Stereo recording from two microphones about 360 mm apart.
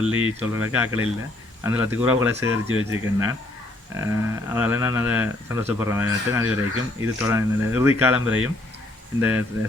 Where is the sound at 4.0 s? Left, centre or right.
Centre.